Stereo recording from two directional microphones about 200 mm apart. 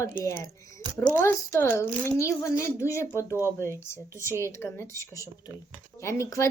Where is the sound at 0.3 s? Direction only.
15° left (ahead or behind).